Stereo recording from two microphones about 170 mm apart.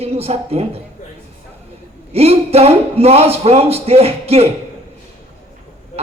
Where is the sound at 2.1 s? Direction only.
35° right (ahead or behind).